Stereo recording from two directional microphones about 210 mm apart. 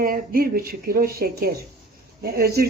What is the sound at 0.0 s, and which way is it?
A woman's voice, 45° right (ahead or behind).